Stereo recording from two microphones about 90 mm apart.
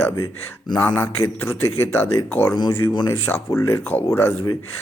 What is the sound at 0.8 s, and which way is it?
A man's voice, 20° left (ahead or behind).